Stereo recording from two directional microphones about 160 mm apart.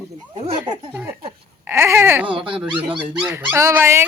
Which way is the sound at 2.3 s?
30° right (ahead or behind).